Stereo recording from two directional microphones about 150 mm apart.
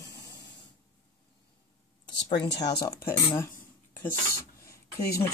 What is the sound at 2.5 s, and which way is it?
Speech, 90° left.